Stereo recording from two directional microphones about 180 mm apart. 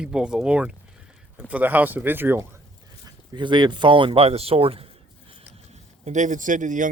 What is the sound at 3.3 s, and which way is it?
Speech, 25° right (ahead or behind).